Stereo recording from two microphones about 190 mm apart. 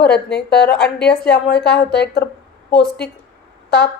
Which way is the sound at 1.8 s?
60° left (ahead or behind).